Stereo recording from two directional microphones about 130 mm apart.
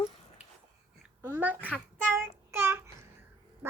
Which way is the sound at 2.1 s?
15° right (ahead or behind).